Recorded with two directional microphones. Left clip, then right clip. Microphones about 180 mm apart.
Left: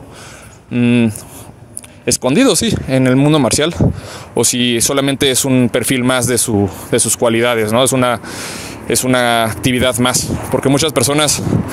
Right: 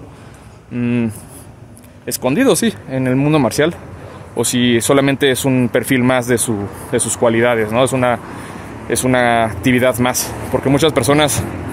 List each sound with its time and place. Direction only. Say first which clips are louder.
0.7 s speech: left 6 dB; 20° left (ahead or behind)